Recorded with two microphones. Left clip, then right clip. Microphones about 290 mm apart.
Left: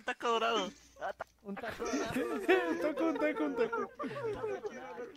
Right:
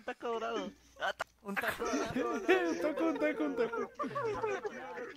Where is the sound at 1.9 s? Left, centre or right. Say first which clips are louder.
Right 1 dB; centre.